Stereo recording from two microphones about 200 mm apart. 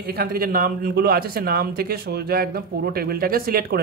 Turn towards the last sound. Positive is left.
turn(degrees=-50)  # may be behind; listen again after turning